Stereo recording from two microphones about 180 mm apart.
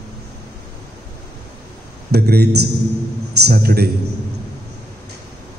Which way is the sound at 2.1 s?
60° right (ahead or behind).